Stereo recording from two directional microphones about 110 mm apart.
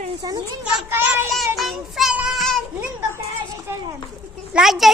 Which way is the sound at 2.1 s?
10° right (ahead or behind).